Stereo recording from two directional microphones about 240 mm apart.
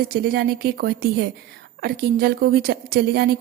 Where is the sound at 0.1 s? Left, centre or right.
Right.